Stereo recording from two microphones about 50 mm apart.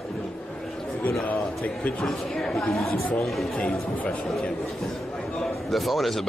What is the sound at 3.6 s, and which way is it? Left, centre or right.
Speech, centre.